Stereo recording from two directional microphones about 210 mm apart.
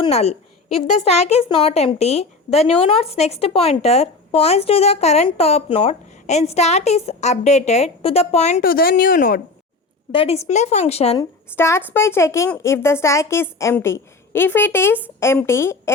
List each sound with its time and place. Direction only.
0.0 s speech: 30° left (ahead or behind)
10.1 s a woman's voice: 25° left (ahead or behind)
11.2 s a woman's voice: 10° left (ahead or behind)